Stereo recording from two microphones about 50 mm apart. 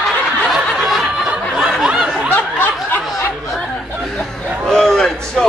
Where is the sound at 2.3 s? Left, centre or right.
Left.